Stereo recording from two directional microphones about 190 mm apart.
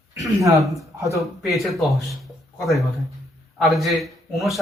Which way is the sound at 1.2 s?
Centre (ahead or behind).